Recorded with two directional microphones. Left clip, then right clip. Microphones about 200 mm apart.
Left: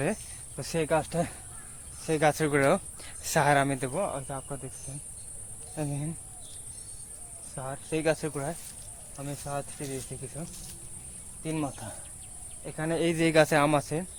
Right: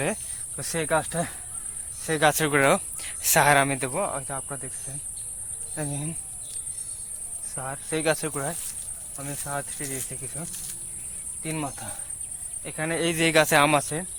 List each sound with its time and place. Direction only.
0.0 s speech: centre (ahead or behind); by 4.6 s 15° right (ahead or behind)
5.7 s speech: 20° right (ahead or behind)
7.5 s speech: 20° right (ahead or behind)
11.4 s speech: 15° right (ahead or behind)